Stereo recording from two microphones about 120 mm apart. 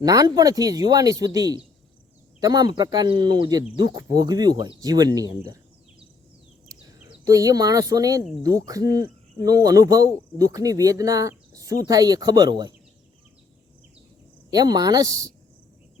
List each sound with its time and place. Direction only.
0.0 s speech: 30° right (ahead or behind)
7.3 s speech: 30° right (ahead or behind)
14.5 s speech: 30° right (ahead or behind)